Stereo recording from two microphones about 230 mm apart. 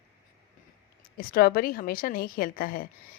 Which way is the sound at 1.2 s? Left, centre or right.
Left.